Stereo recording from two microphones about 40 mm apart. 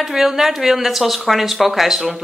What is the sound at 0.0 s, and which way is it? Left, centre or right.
A woman's voice, centre.